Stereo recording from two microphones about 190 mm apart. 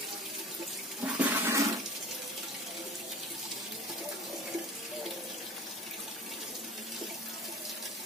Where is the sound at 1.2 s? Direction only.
15° right (ahead or behind).